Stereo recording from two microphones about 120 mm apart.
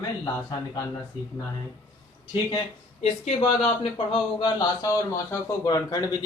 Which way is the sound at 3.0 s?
55° left (ahead or behind).